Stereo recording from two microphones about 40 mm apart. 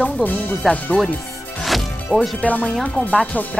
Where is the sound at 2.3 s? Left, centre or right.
Left.